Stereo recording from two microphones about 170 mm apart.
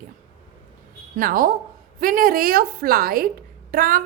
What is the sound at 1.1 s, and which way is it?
A woman's voice, 55° right (ahead or behind).